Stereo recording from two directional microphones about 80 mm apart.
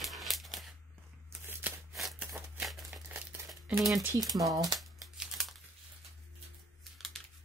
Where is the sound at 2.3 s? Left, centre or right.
Centre.